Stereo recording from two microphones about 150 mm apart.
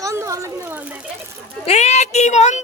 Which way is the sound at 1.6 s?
50° left (ahead or behind).